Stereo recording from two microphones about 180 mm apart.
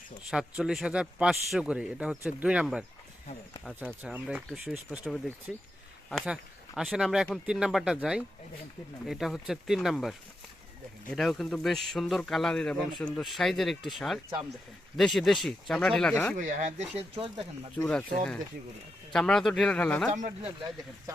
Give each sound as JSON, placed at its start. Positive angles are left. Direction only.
{"t": 0.3, "sound": "a man's voice", "side_deg": -5}
{"t": 16.4, "sound": "speech", "side_deg": -45}
{"t": 17.7, "sound": "a man's voice", "side_deg": 5}
{"t": 19.1, "sound": "a man's voice", "side_deg": 5}
{"t": 20.1, "sound": "speech", "side_deg": -40}